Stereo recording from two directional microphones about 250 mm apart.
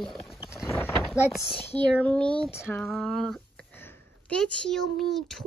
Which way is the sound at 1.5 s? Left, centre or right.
Centre.